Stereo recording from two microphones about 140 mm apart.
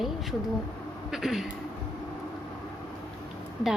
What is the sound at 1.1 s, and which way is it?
Speech, centre (ahead or behind).